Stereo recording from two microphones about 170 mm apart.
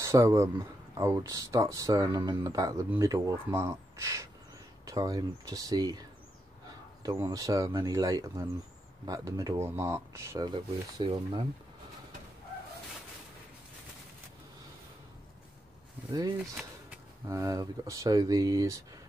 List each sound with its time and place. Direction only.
0.0 s speech: 20° right (ahead or behind)
10.5 s speech: 30° right (ahead or behind)
16.1 s speech: 20° right (ahead or behind)